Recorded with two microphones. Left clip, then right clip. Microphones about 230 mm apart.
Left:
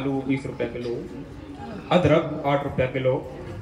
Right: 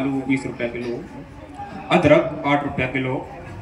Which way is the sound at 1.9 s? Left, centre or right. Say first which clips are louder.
Right 4 dB; right.